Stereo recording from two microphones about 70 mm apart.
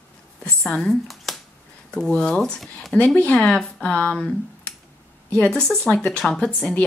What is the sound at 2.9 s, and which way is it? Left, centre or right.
Speech, centre.